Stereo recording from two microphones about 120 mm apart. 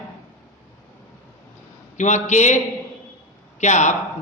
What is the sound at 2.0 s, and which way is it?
Speech, 80° left.